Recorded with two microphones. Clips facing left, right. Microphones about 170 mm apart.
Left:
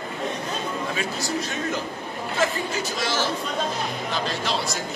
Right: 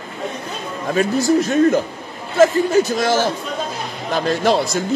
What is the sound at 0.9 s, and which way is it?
Speech, 45° right (ahead or behind).